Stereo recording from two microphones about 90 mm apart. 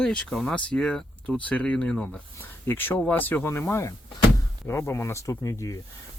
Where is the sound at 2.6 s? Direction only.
25° left (ahead or behind).